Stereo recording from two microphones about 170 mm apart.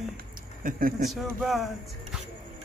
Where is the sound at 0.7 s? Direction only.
55° right (ahead or behind).